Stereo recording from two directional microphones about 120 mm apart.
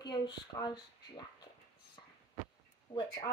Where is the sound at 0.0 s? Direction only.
40° left (ahead or behind).